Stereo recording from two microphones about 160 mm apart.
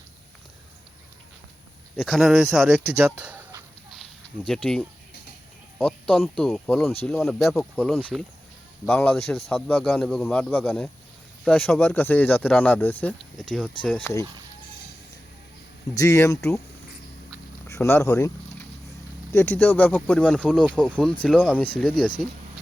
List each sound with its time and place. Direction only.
2.0 s speech: centre (ahead or behind)
3.0 s a sound: 10° right (ahead or behind)
4.4 s speech: 5° left (ahead or behind)
16.0 s speech: 15° left (ahead or behind)
17.7 s speech: 15° left (ahead or behind)
19.3 s speech: 15° left (ahead or behind)